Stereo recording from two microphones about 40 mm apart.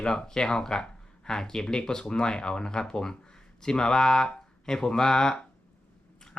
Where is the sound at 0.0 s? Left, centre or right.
Centre.